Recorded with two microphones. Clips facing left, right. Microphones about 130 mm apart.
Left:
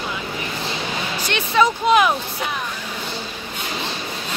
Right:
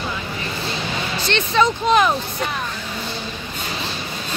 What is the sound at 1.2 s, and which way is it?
Music, 10° left (ahead or behind).